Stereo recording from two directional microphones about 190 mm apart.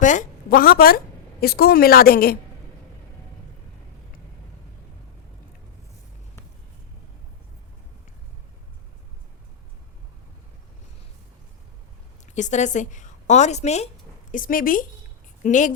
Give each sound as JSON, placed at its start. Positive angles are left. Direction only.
{"t": 0.0, "sound": "a woman's voice", "side_deg": 40}
{"t": 12.2, "sound": "a woman's voice", "side_deg": 40}
{"t": 14.3, "sound": "a woman's voice", "side_deg": 45}